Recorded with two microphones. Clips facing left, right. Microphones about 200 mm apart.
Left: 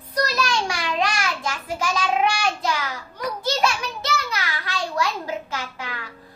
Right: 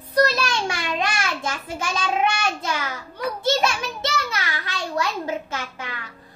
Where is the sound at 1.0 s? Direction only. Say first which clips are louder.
Left 1 dB; 25° right (ahead or behind).